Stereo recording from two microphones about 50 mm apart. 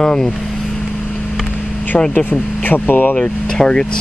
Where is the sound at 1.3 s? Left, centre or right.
Centre.